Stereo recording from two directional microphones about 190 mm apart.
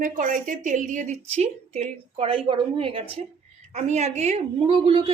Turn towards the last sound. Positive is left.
turn(degrees=-30)  # may be behind; listen again after turning